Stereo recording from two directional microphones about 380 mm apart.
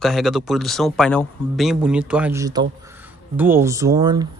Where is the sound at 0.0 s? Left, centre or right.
Centre.